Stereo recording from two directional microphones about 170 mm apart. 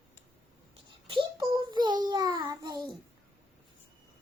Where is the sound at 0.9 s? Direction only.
30° right (ahead or behind).